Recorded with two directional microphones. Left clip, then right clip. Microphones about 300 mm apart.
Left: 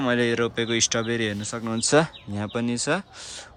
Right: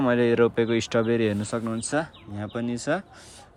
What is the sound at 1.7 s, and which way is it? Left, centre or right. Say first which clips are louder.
Speech: left 7 dB; centre.